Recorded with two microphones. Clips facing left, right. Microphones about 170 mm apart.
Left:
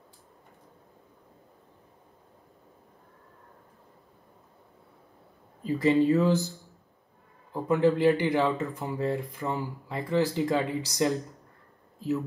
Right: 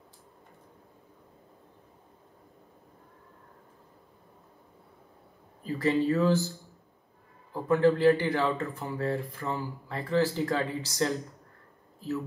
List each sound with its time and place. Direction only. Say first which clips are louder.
5.6 s speech: left 4 dB; 20° left (ahead or behind)
7.5 s speech: even; 15° left (ahead or behind)